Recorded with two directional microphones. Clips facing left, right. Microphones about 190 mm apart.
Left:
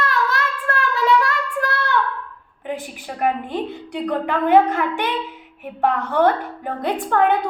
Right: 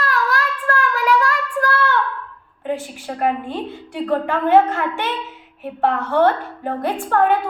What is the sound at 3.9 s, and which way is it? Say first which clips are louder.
A woman's voice: right 2 dB; 15° left (ahead or behind).